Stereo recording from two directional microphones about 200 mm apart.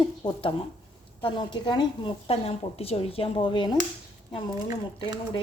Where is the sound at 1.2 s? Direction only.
25° left (ahead or behind).